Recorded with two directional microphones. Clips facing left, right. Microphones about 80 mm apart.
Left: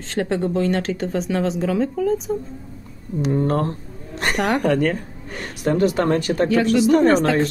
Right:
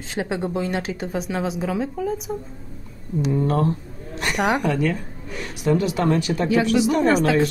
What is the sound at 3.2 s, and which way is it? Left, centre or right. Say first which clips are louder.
Speech: left 2 dB; left.